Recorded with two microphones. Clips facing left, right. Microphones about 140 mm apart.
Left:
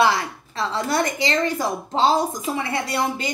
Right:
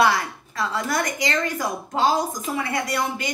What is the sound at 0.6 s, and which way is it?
Speech, 25° left (ahead or behind).